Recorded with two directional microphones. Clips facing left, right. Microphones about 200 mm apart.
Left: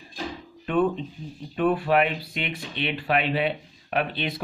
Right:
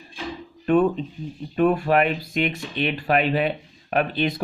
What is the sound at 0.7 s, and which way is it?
Speech, 45° right (ahead or behind).